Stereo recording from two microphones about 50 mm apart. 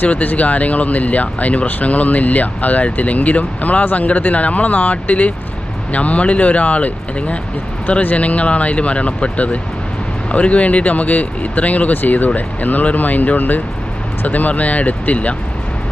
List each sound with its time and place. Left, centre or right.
0.1 s speech: left